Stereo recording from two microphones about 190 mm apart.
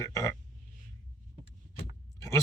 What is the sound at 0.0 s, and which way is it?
Speech, 15° left (ahead or behind).